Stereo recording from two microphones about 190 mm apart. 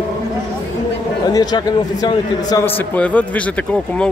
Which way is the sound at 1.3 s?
20° left (ahead or behind).